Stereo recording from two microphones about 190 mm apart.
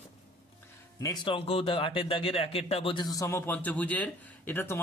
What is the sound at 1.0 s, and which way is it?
A man's voice, 25° left (ahead or behind).